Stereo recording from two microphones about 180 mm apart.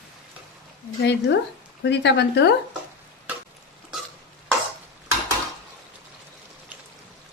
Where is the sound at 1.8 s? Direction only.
75° left (ahead or behind).